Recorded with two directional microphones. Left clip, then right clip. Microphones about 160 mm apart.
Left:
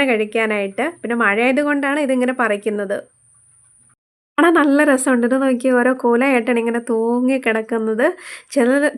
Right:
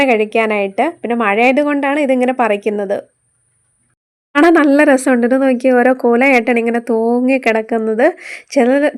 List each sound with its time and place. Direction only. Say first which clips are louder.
0.0 s speech: right 5 dB; 25° right (ahead or behind)
4.4 s speech: right 4 dB; 25° right (ahead or behind)